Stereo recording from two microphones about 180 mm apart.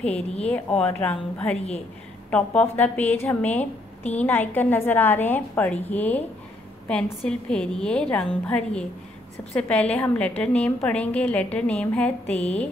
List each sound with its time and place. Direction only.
0.1 s speech: 35° left (ahead or behind)
0.5 s a woman's voice: 5° left (ahead or behind)
3.5 s a woman's voice: 40° left (ahead or behind)
4.2 s a woman's voice: 10° left (ahead or behind)